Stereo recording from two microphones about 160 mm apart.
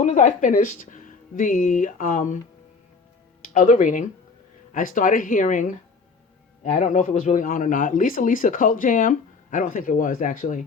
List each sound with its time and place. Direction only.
0.0 s speech: 50° left (ahead or behind)
3.4 s speech: 55° left (ahead or behind)